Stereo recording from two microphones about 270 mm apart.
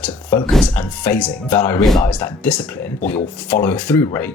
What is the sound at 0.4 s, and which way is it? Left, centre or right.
Speech, centre.